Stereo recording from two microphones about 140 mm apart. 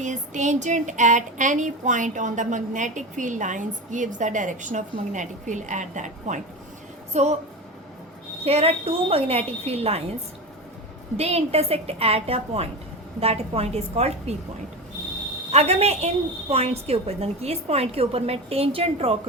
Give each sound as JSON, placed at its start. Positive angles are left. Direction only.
{"t": 0.0, "sound": "a sound", "side_deg": -60}
{"t": 7.1, "sound": "speech", "side_deg": -55}
{"t": 8.4, "sound": "a woman's voice", "side_deg": -45}
{"t": 11.2, "sound": "a woman's voice", "side_deg": -45}
{"t": 15.5, "sound": "a woman's voice", "side_deg": -50}